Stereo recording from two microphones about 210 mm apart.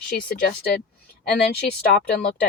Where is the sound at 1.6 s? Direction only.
50° left (ahead or behind).